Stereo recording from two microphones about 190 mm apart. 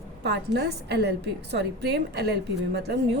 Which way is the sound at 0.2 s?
60° right (ahead or behind).